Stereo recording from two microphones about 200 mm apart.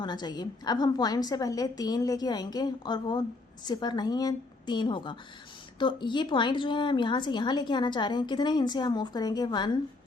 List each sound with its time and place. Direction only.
0.0 s a woman's voice: 20° left (ahead or behind)